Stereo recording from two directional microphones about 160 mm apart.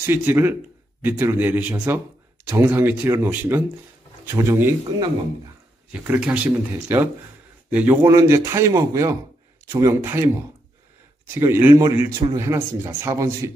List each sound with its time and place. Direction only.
0.0 s speech: 15° right (ahead or behind)
5.9 s speech: 10° right (ahead or behind)
8.0 s speech: 20° right (ahead or behind)
11.3 s speech: 15° right (ahead or behind)